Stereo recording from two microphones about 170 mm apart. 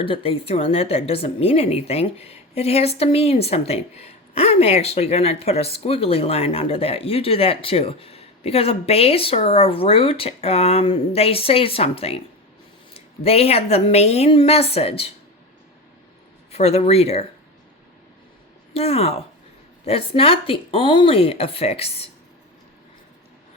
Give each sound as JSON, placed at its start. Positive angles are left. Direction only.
{"t": 0.0, "sound": "a woman's voice", "side_deg": 35}
{"t": 16.5, "sound": "a woman's voice", "side_deg": 40}
{"t": 18.7, "sound": "a woman's voice", "side_deg": 35}